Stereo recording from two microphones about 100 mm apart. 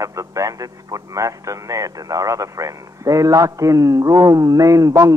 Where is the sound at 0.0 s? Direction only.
35° right (ahead or behind).